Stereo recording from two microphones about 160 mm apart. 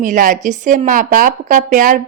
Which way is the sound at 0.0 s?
55° right (ahead or behind).